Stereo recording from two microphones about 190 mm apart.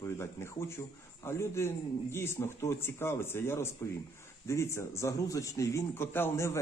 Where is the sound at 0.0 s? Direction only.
15° left (ahead or behind).